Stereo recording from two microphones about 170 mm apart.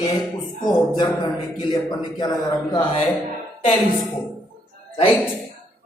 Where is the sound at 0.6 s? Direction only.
25° left (ahead or behind).